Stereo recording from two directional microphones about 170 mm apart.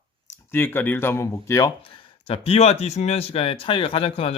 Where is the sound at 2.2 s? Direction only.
35° left (ahead or behind).